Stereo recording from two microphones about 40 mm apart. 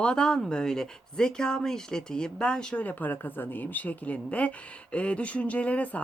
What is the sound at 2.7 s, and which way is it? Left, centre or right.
Speech, left.